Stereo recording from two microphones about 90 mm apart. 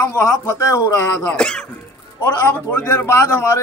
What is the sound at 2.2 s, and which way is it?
A man's voice, 25° left (ahead or behind).